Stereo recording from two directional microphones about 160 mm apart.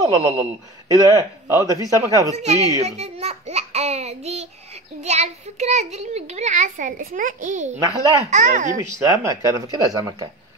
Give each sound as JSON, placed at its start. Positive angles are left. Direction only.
{"t": 0.0, "sound": "speech", "side_deg": -20}
{"t": 2.3, "sound": "a child's voice", "side_deg": -45}
{"t": 8.9, "sound": "speech", "side_deg": -20}